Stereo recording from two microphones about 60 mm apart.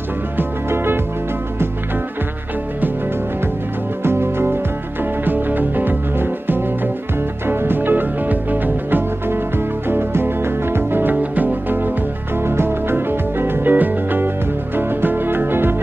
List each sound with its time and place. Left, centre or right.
0.4 s music: right
4.0 s music: right
5.2 s music: right
12.4 s music: right